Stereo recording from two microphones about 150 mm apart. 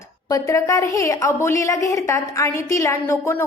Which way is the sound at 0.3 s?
20° left (ahead or behind).